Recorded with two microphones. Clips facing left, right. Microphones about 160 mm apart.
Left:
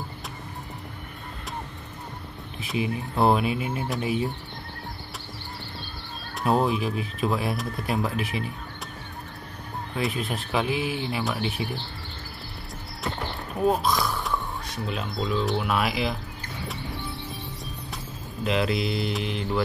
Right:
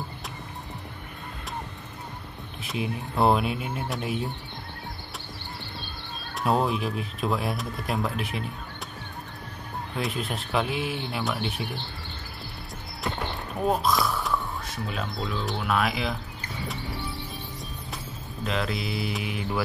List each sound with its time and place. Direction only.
2.6 s speech: centre (ahead or behind)
6.4 s speech: centre (ahead or behind)
9.9 s speech: centre (ahead or behind)
13.7 s speech: centre (ahead or behind)
18.4 s speech: centre (ahead or behind)